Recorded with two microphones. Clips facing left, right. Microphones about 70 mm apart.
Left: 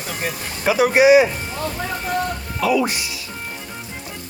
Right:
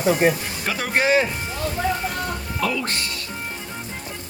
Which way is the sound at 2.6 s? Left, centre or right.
Centre.